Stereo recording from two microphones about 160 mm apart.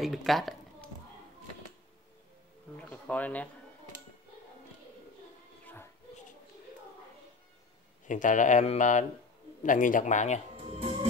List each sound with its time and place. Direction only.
0.0 s speech: centre (ahead or behind)
2.8 s a sound: 10° left (ahead or behind)
8.1 s speech: 55° left (ahead or behind)